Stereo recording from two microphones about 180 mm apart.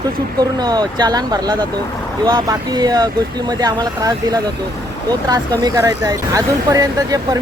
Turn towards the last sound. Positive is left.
turn(degrees=-20)  # may be behind; listen again after turning